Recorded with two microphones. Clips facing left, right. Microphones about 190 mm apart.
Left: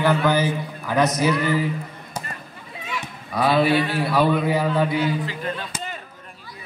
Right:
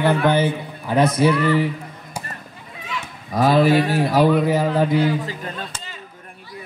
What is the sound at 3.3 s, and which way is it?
Speech, 45° right (ahead or behind).